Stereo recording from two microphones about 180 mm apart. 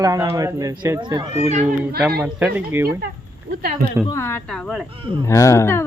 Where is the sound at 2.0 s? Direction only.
Centre (ahead or behind).